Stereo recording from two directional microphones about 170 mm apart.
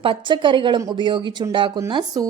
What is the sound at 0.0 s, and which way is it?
A woman's voice, 30° right (ahead or behind).